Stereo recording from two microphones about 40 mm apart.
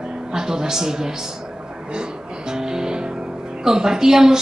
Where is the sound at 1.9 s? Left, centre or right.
Right.